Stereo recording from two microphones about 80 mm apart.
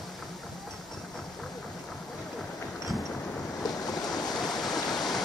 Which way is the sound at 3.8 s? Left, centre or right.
Left.